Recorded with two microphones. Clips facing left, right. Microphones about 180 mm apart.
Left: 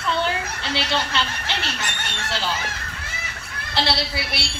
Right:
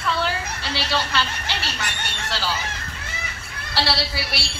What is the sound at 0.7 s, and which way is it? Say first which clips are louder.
Speech: left 1 dB; 20° left (ahead or behind).